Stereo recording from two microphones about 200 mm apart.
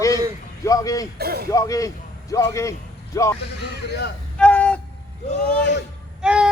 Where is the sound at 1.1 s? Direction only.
50° right (ahead or behind).